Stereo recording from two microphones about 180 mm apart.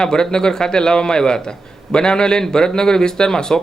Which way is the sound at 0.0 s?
5° left (ahead or behind).